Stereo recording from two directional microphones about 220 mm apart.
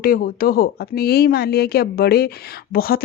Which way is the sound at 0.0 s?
40° left (ahead or behind).